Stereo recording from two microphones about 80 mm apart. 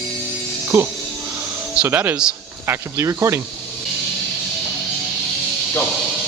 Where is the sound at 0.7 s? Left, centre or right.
Right.